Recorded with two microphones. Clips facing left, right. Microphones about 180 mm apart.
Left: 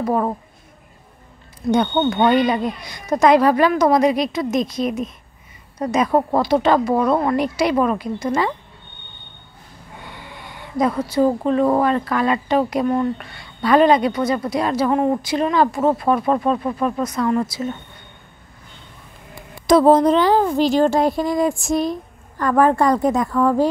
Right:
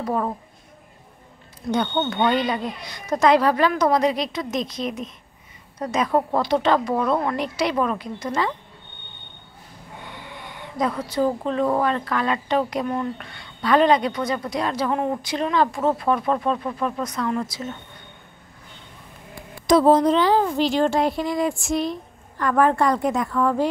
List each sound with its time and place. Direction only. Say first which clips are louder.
1.7 s a woman's voice: left 5 dB; 10° left (ahead or behind)
2.1 s a woman's voice: left 5 dB; 50° left (ahead or behind)
2.5 s a woman's voice: left 5 dB; 10° left (ahead or behind)
6.9 s a woman's voice: left 4 dB; 40° left (ahead or behind)
7.2 s a woman's voice: left 5 dB; 10° left (ahead or behind)
10.0 s a sound: even; 5° left (ahead or behind)
11.5 s a woman's voice: left 5 dB; 5° left (ahead or behind)
19.6 s a woman's voice: left 3 dB; 55° left (ahead or behind)